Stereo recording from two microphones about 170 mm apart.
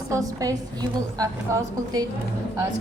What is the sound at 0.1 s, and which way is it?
A woman's voice, 20° right (ahead or behind).